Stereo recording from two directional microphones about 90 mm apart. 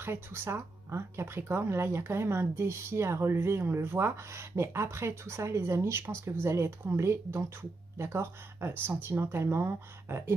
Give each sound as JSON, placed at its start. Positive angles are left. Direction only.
{"t": 0.0, "sound": "speech", "side_deg": -25}